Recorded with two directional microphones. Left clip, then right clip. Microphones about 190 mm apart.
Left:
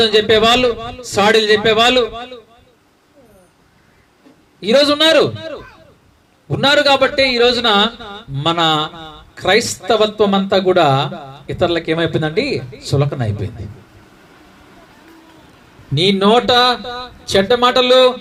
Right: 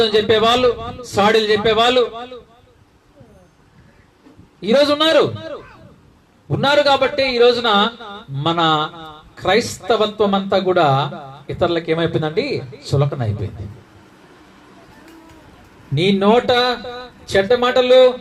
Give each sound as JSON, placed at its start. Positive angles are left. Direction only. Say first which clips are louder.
{"t": 0.0, "sound": "a man's voice", "louder": "left 3 dB", "side_deg": 50}
{"t": 4.6, "sound": "a man's voice", "louder": "left 2 dB", "side_deg": 50}
{"t": 16.0, "sound": "a man's voice", "louder": "left 2 dB", "side_deg": 50}